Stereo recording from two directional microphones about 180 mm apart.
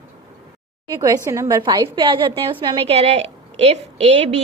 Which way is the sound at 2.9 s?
35° right (ahead or behind).